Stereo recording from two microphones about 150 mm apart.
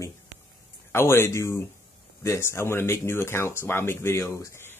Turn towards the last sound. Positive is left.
turn(degrees=20)  # may be behind; listen again after turning